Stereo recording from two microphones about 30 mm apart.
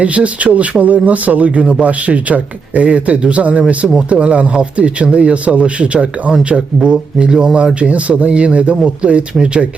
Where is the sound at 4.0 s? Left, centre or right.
Right.